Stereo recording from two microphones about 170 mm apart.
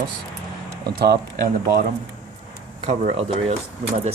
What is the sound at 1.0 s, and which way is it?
Speech, 65° right (ahead or behind).